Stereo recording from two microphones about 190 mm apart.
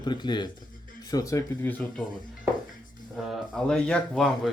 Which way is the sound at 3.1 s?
Centre (ahead or behind).